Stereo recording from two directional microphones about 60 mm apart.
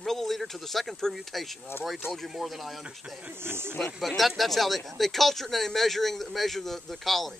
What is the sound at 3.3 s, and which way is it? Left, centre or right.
Speech, right.